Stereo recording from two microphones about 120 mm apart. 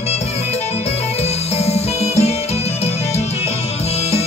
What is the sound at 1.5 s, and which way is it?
Music, 60° left (ahead or behind).